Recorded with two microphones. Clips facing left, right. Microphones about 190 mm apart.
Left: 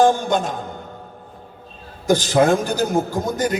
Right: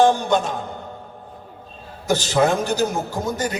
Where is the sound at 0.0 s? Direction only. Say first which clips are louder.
Even; 50° left (ahead or behind).